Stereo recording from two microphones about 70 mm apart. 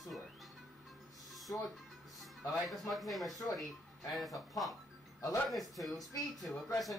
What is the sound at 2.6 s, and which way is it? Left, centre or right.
A man's voice, centre.